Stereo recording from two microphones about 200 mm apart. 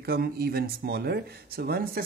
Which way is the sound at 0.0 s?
50° right (ahead or behind).